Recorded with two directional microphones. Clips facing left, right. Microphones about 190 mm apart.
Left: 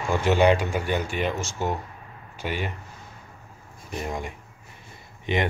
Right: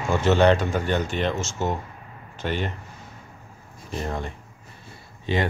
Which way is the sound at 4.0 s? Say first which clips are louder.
Right 1 dB; 10° left (ahead or behind).